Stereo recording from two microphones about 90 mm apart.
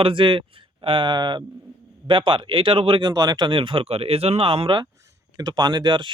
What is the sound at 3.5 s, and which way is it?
Speech, 75° right (ahead or behind).